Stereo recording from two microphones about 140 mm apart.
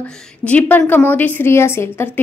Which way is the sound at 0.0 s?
10° left (ahead or behind).